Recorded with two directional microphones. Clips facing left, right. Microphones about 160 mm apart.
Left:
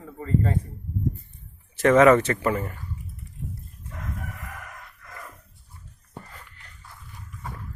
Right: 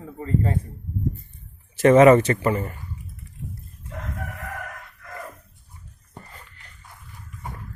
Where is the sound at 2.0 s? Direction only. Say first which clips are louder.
Right 2 dB; 5° right (ahead or behind).